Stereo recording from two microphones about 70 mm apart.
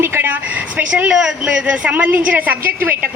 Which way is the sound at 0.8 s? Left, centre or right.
Centre.